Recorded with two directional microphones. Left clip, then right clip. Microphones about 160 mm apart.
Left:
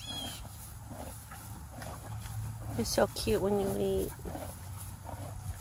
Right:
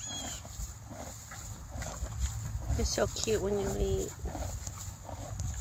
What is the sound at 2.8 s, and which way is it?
Speech, 20° left (ahead or behind).